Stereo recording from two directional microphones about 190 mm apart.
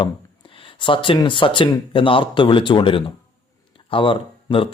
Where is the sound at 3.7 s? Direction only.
25° left (ahead or behind).